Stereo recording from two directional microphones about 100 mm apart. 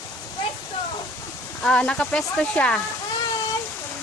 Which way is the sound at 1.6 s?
10° left (ahead or behind).